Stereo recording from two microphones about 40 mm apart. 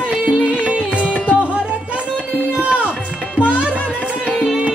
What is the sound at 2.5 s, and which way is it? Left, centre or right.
Music, right.